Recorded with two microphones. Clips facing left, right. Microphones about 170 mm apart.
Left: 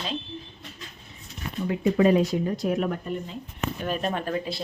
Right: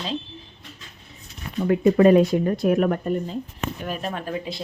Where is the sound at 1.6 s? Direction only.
55° right (ahead or behind).